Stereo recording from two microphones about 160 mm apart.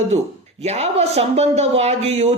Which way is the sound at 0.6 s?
40° right (ahead or behind).